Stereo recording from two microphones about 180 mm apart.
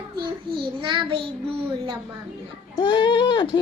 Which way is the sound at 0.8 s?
25° right (ahead or behind).